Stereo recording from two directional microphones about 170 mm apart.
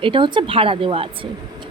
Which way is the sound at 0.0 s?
30° right (ahead or behind).